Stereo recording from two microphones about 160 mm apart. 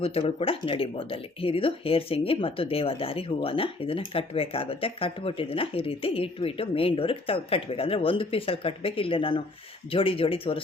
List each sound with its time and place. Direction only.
0.0 s speech: 40° left (ahead or behind)